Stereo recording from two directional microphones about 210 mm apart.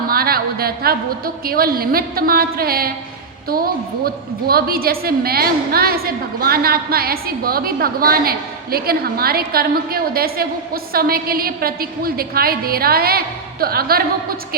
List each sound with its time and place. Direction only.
0.1 s a woman's voice: 45° right (ahead or behind)